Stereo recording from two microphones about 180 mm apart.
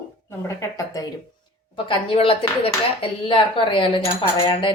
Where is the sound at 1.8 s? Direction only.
30° left (ahead or behind).